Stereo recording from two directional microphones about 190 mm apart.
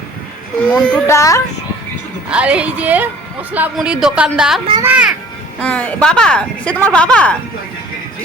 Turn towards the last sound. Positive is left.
turn(degrees=5)  # may be behind; listen again after turning